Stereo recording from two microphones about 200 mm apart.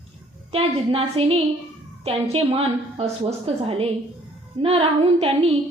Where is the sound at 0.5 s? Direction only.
30° right (ahead or behind).